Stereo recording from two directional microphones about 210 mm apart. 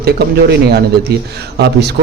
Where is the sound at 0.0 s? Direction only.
50° right (ahead or behind).